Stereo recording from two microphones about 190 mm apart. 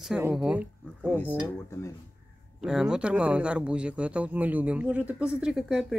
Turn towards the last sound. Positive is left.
turn(degrees=0)  # may be behind; listen again after turning